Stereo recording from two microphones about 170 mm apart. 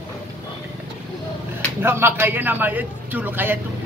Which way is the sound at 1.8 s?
15° right (ahead or behind).